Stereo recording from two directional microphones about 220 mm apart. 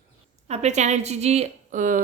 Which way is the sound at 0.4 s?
30° right (ahead or behind).